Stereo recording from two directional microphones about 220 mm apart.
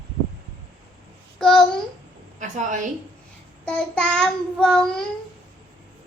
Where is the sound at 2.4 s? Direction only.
35° right (ahead or behind).